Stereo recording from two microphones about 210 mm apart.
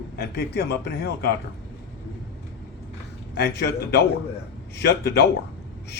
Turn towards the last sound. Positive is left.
turn(degrees=50)  # may be behind; listen again after turning